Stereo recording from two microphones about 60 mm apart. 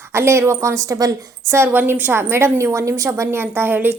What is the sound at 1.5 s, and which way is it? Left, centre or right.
A woman's voice, right.